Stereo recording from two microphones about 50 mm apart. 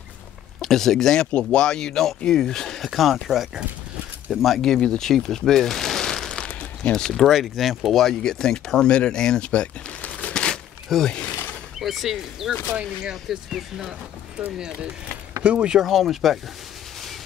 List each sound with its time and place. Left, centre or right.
0.6 s speech: centre
4.6 s a sound: centre
7.0 s speech: centre
10.9 s speech: centre; by 15.7 s right
15.7 s speech: centre